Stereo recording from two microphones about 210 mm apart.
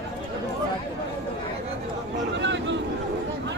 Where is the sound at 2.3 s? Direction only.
55° right (ahead or behind).